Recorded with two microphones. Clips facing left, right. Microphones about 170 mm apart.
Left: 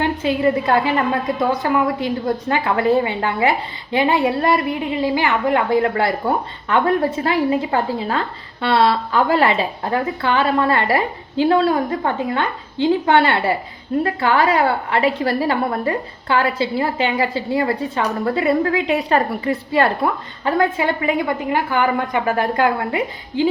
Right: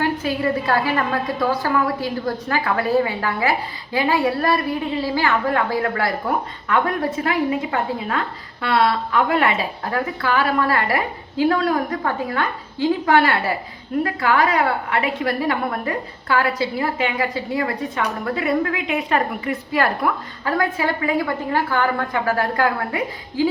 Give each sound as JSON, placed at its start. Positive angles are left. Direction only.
{"t": 0.0, "sound": "a woman's voice", "side_deg": 20}